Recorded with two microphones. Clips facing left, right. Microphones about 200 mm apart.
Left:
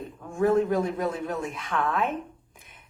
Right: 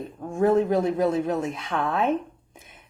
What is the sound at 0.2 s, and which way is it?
A woman's voice, 40° right (ahead or behind).